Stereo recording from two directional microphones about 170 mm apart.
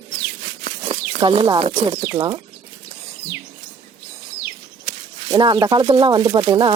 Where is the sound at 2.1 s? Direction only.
20° right (ahead or behind).